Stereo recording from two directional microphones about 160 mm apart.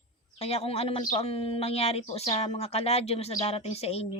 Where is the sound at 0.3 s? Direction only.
40° left (ahead or behind).